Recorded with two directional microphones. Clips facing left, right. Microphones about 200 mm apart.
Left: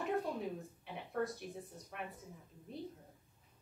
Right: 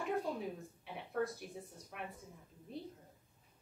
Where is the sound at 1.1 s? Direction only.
Centre (ahead or behind).